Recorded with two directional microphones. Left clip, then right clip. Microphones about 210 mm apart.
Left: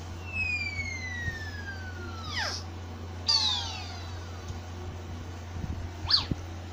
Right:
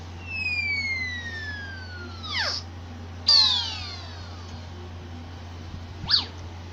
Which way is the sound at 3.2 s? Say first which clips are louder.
Right 8 dB; 30° right (ahead or behind).